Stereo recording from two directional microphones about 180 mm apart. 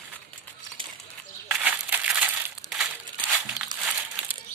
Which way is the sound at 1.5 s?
5° right (ahead or behind).